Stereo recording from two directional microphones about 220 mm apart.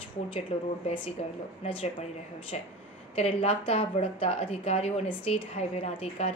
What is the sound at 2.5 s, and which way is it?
A woman's voice, 30° left (ahead or behind).